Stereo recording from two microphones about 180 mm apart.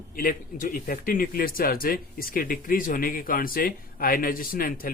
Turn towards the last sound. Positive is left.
turn(degrees=55)  # may be behind; listen again after turning